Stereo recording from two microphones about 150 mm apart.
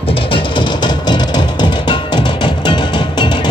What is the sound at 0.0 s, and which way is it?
Music, 35° left (ahead or behind).